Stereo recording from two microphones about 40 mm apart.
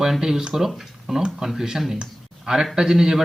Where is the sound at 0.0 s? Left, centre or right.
Centre.